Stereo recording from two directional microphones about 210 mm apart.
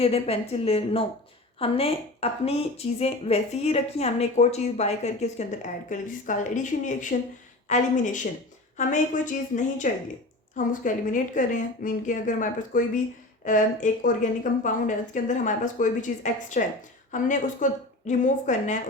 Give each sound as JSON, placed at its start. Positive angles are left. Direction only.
{"t": 0.0, "sound": "speech", "side_deg": 30}